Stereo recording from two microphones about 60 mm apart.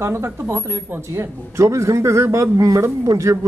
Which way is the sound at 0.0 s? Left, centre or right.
Right.